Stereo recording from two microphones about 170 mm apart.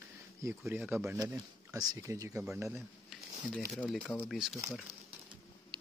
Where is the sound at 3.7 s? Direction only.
5° left (ahead or behind).